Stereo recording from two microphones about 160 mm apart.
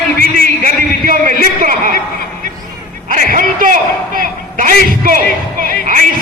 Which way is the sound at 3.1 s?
60° right (ahead or behind).